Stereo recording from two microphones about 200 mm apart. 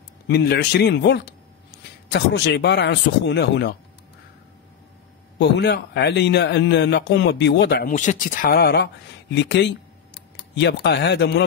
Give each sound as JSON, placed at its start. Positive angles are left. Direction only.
{"t": 0.3, "sound": "a man's voice", "side_deg": 55}
{"t": 5.4, "sound": "a man's voice", "side_deg": 60}
{"t": 7.9, "sound": "a man's voice", "side_deg": 40}